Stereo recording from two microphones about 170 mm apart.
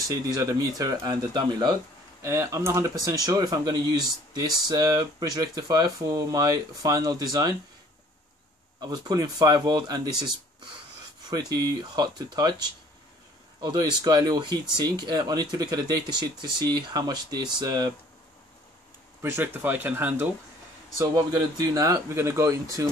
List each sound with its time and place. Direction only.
0.1 s speech: 20° right (ahead or behind)
8.8 s speech: 25° right (ahead or behind)
11.5 s speech: 25° right (ahead or behind)
19.2 s speech: 10° right (ahead or behind)
21.0 s speech: 25° right (ahead or behind)